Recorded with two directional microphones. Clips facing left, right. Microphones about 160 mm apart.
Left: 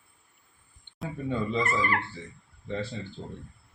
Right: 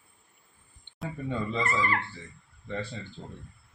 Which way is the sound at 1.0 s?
Centre (ahead or behind).